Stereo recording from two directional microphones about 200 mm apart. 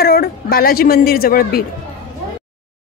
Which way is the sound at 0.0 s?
50° left (ahead or behind).